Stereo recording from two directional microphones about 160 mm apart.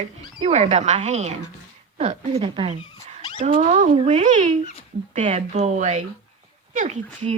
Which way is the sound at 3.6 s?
50° right (ahead or behind).